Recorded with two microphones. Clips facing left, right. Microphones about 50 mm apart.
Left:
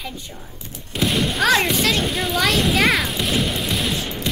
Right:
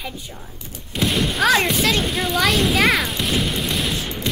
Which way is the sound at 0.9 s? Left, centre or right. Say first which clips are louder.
Even; centre.